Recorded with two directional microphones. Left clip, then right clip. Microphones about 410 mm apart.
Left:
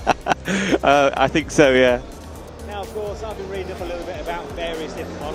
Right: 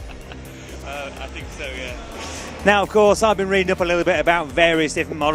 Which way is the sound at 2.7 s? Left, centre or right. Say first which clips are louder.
Right 12 dB; right.